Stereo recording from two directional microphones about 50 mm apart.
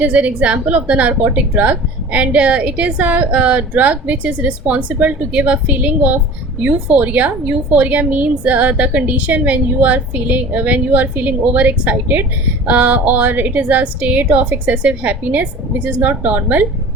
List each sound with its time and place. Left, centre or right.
0.0 s a woman's voice: right